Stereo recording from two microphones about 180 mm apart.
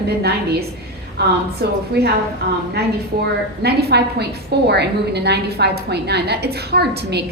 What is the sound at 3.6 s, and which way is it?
A woman's voice, 65° right (ahead or behind).